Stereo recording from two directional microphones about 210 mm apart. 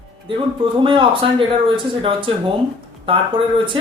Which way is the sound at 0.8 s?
25° right (ahead or behind).